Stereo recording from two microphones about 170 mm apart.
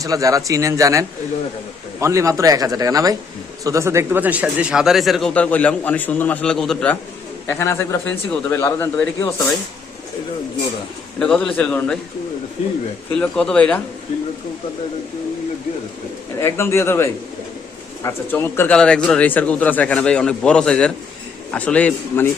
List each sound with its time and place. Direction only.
0.0 s a man's voice: 20° right (ahead or behind); by 6.9 s 5° left (ahead or behind)
7.4 s speech: 15° left (ahead or behind)
11.2 s speech: 5° left (ahead or behind)
13.1 s speech: 5° left (ahead or behind)
16.4 s speech: 15° left (ahead or behind)